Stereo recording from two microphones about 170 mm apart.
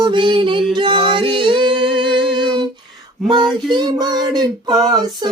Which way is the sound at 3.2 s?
Centre (ahead or behind).